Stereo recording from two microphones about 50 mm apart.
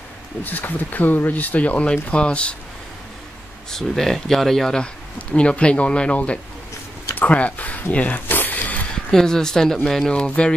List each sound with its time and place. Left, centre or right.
0.4 s speech: left
3.7 s speech: centre
5.3 s speech: left
7.2 s a sound: left
9.1 s speech: centre
10.1 s speech: left